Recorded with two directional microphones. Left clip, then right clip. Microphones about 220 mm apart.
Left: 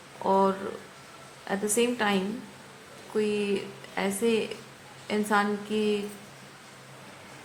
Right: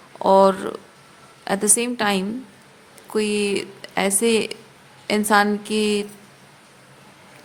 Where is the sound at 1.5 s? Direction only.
50° right (ahead or behind).